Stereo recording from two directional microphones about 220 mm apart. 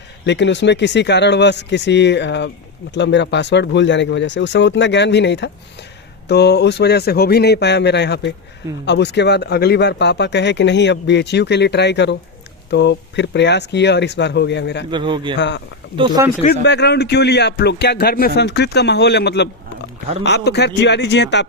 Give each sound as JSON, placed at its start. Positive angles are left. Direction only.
{"t": 0.3, "sound": "speech", "side_deg": 55}
{"t": 14.8, "sound": "a man's voice", "side_deg": -20}
{"t": 15.4, "sound": "speech", "side_deg": 55}
{"t": 16.0, "sound": "speech", "side_deg": -15}
{"t": 16.6, "sound": "speech", "side_deg": 50}